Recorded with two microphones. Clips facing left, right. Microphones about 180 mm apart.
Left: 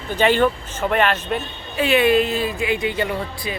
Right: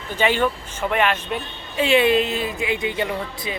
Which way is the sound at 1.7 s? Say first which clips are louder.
Left 1 dB; 25° right (ahead or behind).